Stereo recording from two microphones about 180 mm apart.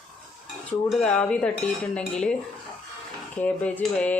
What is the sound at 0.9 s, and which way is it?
Speech, 5° left (ahead or behind).